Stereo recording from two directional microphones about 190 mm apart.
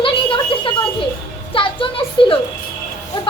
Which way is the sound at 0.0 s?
25° left (ahead or behind).